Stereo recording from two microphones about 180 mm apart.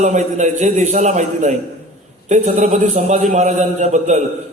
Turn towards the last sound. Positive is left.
turn(degrees=-40)  # may be behind; listen again after turning